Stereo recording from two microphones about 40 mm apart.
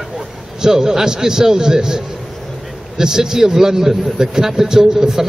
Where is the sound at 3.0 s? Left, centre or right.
Centre.